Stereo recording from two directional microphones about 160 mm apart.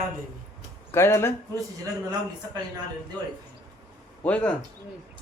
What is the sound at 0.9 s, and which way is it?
Speech, 15° left (ahead or behind).